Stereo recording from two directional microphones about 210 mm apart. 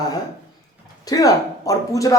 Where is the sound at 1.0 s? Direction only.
15° left (ahead or behind).